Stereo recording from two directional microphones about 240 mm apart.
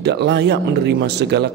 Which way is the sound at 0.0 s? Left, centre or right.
Right.